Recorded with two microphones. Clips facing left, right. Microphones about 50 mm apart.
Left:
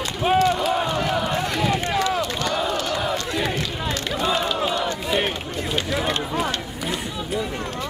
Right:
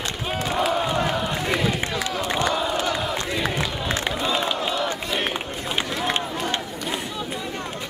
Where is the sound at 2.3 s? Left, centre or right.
Right.